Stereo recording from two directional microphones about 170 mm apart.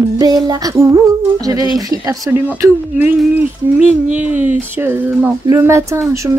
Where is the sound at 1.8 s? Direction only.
20° right (ahead or behind).